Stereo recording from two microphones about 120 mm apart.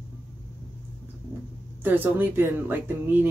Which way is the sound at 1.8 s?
15° right (ahead or behind).